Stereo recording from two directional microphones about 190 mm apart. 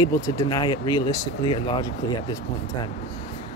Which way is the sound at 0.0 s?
20° left (ahead or behind).